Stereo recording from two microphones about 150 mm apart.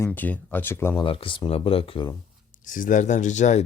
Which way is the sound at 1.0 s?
35° left (ahead or behind).